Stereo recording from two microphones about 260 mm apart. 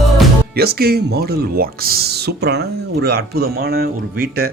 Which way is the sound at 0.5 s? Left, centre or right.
Right.